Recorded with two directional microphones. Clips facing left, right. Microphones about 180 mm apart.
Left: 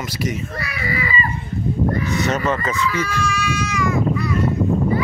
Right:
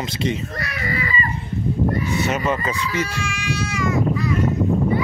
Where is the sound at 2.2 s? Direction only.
10° right (ahead or behind).